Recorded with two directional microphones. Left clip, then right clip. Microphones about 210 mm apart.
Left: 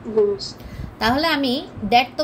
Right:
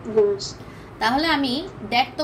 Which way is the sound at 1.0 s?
50° left (ahead or behind).